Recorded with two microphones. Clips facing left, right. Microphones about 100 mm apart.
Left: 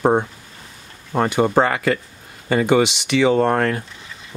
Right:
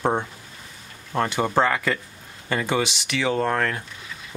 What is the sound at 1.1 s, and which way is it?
Speech, 15° left (ahead or behind).